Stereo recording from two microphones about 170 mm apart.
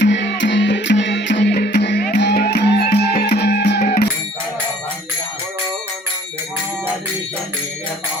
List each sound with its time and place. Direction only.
0.0 s music: 90° left; by 3.8 s 75° left (ahead or behind)
3.8 s music: 50° left (ahead or behind)